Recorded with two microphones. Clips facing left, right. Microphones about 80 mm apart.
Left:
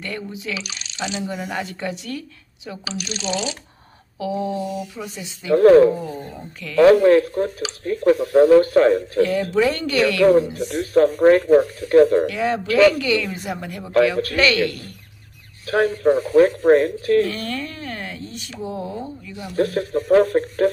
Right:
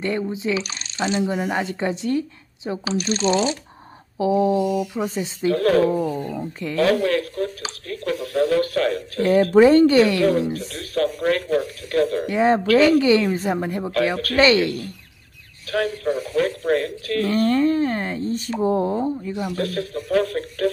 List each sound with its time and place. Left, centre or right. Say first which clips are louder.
0.0 s speech: right 6 dB; right
1.2 s speech: right 4 dB; right
4.2 s speech: right 6 dB; right
5.0 s speech: right 10 dB; right
5.5 s speech: left 7 dB; left
9.2 s speech: right 7 dB; right
10.7 s speech: left 7 dB; left
12.3 s speech: right 5 dB; right
15.6 s speech: left 5 dB; left
17.3 s speech: right 10 dB; right
19.5 s speech: left 5 dB; left